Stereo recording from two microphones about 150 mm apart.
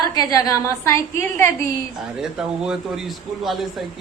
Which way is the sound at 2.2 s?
5° right (ahead or behind).